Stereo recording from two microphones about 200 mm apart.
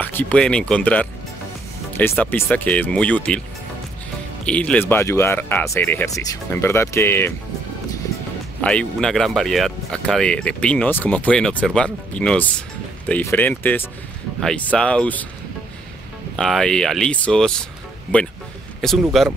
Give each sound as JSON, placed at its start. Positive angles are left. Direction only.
{"t": 0.0, "sound": "speech", "side_deg": 10}
{"t": 4.5, "sound": "speech", "side_deg": 5}
{"t": 8.5, "sound": "speech", "side_deg": 5}
{"t": 16.3, "sound": "speech", "side_deg": 0}
{"t": 18.8, "sound": "speech", "side_deg": 0}